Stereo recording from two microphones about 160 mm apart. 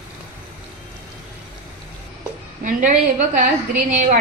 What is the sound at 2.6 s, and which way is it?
Speech, 55° right (ahead or behind).